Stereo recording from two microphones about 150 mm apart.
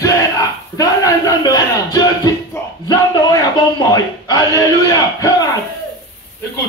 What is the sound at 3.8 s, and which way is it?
A man's voice, 25° left (ahead or behind).